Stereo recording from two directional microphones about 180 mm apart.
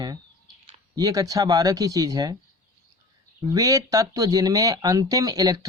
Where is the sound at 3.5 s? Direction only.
20° right (ahead or behind).